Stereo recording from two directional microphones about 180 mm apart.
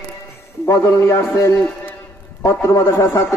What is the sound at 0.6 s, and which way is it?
A man's voice, 15° left (ahead or behind).